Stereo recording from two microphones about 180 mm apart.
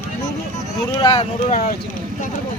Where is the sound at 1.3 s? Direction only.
35° left (ahead or behind).